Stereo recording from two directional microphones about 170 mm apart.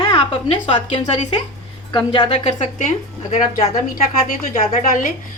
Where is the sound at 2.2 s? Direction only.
40° left (ahead or behind).